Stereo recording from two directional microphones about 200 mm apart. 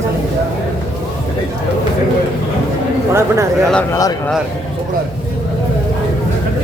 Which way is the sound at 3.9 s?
15° left (ahead or behind).